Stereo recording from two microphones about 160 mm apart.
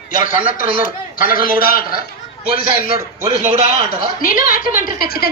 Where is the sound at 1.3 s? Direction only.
65° left (ahead or behind).